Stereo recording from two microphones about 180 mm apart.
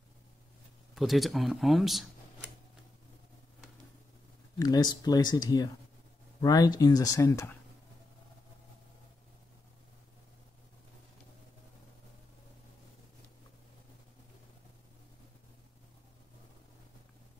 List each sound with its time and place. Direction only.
0.9 s speech: centre (ahead or behind)
4.6 s speech: 20° left (ahead or behind)